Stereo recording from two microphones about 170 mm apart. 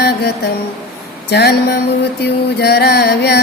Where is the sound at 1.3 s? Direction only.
70° left (ahead or behind).